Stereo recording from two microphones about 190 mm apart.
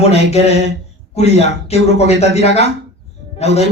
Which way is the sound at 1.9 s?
35° left (ahead or behind).